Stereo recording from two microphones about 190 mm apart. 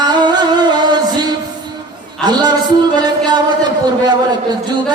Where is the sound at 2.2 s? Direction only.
20° right (ahead or behind).